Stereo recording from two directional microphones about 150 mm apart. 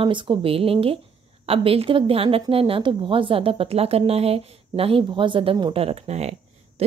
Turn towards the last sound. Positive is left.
turn(degrees=-45)  # may be behind; listen again after turning